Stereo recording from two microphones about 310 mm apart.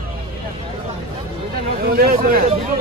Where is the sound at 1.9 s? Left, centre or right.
Right.